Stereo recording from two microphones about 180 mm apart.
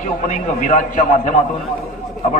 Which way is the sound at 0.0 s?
45° left (ahead or behind).